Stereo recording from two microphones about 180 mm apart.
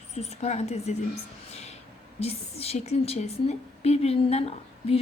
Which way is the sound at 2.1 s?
35° left (ahead or behind).